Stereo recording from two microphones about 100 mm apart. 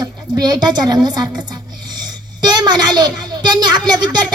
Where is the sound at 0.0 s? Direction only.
40° right (ahead or behind).